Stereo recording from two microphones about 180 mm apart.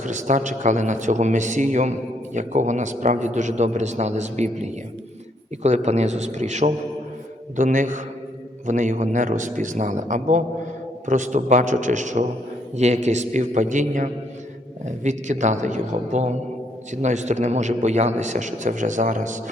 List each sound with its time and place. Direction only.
0.0 s a man's voice: 45° right (ahead or behind)